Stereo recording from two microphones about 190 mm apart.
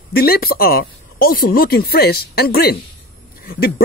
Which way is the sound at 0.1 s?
55° left (ahead or behind).